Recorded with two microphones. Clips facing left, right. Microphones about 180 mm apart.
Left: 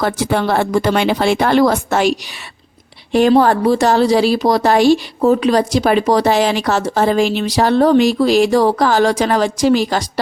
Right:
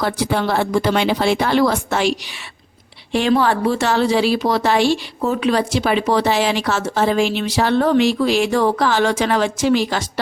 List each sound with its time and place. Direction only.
0.0 s a woman's voice: 50° left (ahead or behind)